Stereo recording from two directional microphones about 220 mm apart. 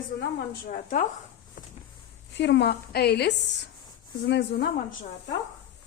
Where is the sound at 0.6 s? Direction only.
35° left (ahead or behind).